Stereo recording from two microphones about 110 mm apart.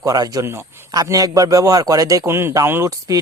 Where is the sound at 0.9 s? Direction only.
35° right (ahead or behind).